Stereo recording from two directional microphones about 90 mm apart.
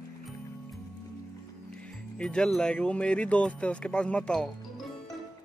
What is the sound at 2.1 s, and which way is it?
Speech, 10° left (ahead or behind).